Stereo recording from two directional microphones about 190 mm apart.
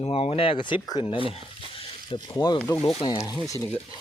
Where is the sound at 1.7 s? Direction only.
25° left (ahead or behind).